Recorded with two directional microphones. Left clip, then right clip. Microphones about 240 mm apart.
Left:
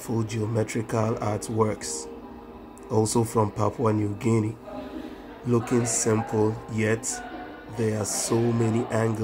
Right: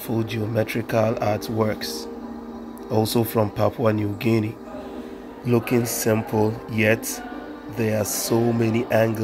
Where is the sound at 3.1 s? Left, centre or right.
Right.